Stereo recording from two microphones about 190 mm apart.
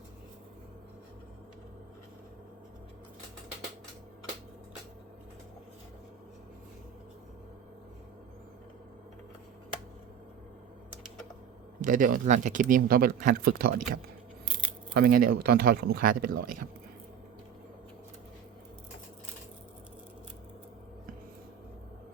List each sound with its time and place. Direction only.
11.8 s speech: 45° right (ahead or behind)